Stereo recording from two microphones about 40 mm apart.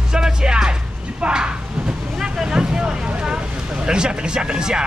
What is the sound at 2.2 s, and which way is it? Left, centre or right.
Vehicle, centre.